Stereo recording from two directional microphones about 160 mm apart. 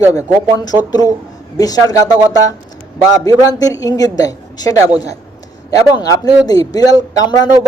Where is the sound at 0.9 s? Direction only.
25° left (ahead or behind).